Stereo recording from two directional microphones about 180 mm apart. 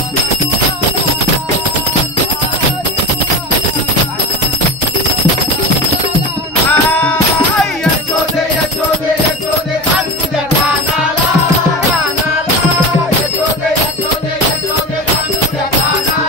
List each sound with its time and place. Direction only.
6.7 s music: 5° left (ahead or behind)